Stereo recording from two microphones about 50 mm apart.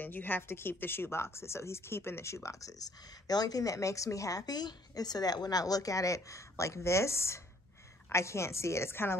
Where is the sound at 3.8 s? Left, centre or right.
Left.